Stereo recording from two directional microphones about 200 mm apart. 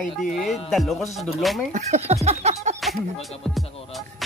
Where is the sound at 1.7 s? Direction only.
35° right (ahead or behind).